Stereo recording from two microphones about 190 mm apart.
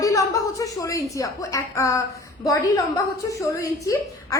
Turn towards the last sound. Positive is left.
turn(degrees=15)  # may be behind; listen again after turning